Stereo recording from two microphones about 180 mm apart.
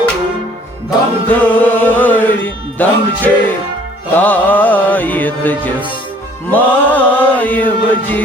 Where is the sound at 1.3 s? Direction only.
10° left (ahead or behind).